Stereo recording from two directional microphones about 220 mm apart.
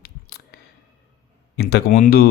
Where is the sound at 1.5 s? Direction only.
50° left (ahead or behind).